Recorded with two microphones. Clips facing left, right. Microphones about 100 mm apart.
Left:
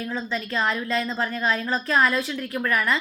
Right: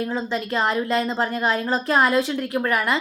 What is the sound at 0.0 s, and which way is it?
A woman's voice, 30° right (ahead or behind).